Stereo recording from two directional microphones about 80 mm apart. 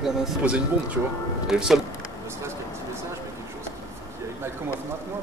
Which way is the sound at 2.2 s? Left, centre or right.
Right.